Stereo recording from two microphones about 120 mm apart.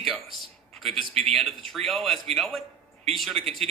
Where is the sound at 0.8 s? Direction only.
Centre (ahead or behind).